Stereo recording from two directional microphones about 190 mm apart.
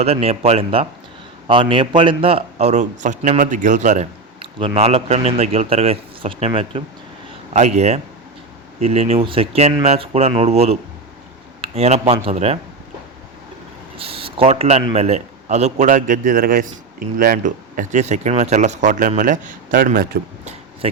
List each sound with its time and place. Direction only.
0.0 s a man's voice: 30° right (ahead or behind)
13.9 s speech: 30° right (ahead or behind); by 20.5 s 45° right (ahead or behind)
20.8 s speech: 30° right (ahead or behind)